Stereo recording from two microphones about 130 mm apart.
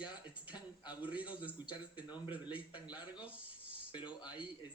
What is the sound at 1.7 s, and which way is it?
A man's voice, 35° left (ahead or behind).